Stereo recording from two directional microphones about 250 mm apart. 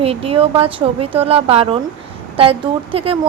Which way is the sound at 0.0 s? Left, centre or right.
Right.